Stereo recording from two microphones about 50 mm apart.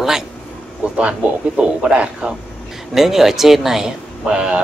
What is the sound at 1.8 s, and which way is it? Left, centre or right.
Speech, centre.